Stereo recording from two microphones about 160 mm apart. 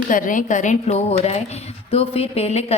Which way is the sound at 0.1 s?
55° left (ahead or behind).